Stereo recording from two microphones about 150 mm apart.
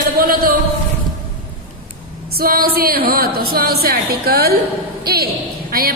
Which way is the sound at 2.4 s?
75° right (ahead or behind).